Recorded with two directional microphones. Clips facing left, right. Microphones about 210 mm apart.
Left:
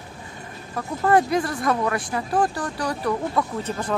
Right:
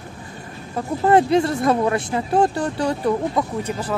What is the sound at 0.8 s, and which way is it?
Speech, 25° right (ahead or behind).